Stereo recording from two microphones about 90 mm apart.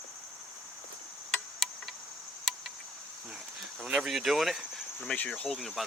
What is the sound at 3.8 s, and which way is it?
Speech, 10° right (ahead or behind).